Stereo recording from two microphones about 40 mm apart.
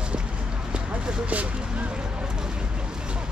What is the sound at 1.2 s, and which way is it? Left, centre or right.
Speech, right.